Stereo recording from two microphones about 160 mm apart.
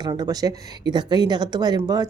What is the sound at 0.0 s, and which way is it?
Speech, 25° right (ahead or behind).